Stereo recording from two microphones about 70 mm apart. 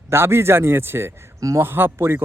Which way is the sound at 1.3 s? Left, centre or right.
Right.